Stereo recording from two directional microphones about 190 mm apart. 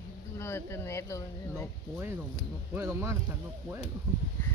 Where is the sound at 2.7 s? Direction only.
15° right (ahead or behind).